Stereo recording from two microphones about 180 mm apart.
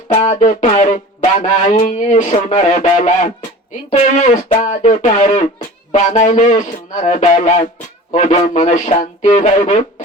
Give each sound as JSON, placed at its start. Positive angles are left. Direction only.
{"t": 0.1, "sound": "speech", "side_deg": 40}